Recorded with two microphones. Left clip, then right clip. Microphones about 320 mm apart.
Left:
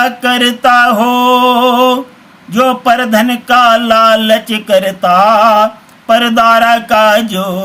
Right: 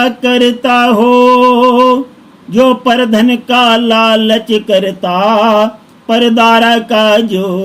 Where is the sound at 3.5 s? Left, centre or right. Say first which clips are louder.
Left 3 dB; centre.